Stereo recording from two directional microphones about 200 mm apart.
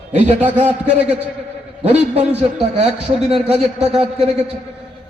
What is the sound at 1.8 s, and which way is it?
Speech, 30° right (ahead or behind).